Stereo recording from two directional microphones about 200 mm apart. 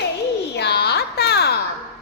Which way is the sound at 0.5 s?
55° left (ahead or behind).